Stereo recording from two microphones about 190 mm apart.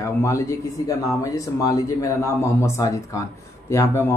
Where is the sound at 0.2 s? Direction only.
15° left (ahead or behind).